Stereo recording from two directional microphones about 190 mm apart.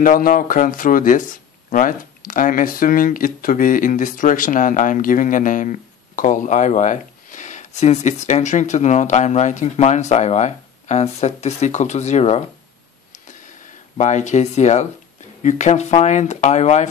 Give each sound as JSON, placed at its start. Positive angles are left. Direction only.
{"t": 0.0, "sound": "speech", "side_deg": 45}
{"t": 13.9, "sound": "speech", "side_deg": 40}